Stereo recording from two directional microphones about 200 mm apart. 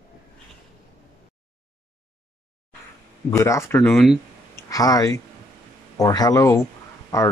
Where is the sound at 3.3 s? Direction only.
15° left (ahead or behind).